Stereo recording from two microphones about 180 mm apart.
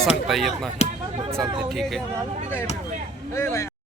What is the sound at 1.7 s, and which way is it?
Speech, centre (ahead or behind).